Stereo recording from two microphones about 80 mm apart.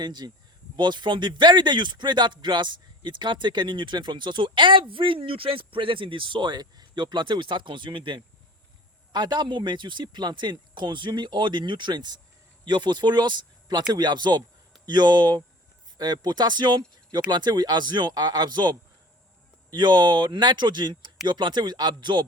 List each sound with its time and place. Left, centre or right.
0.0 s speech: right
0.8 s speech: right
9.1 s speech: right